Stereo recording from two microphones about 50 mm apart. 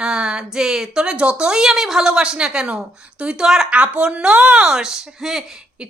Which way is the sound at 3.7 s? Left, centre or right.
Right.